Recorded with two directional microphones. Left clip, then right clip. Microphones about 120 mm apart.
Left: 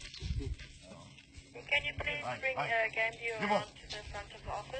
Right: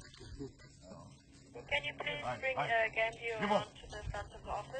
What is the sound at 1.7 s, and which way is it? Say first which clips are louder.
Music: left 3 dB; 25° right (ahead or behind).